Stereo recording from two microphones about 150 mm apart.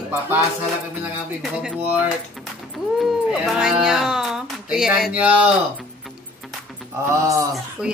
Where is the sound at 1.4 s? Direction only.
5° right (ahead or behind).